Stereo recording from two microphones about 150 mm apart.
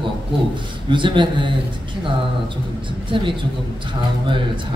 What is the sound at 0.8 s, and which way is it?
Speech, 30° right (ahead or behind).